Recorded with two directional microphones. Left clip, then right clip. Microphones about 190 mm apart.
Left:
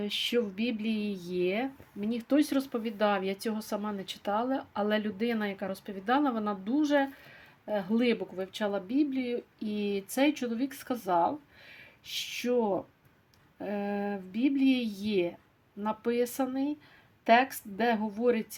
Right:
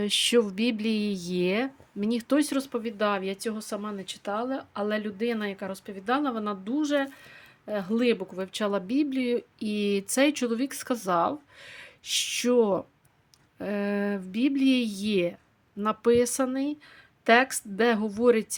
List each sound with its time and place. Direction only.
0.0 s speech: 40° right (ahead or behind)